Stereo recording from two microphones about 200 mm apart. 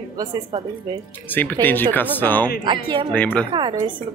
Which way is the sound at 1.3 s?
10° left (ahead or behind).